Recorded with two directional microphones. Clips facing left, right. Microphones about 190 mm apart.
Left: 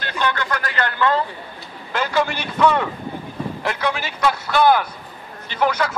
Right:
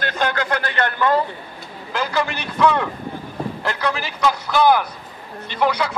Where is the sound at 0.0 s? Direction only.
50° right (ahead or behind).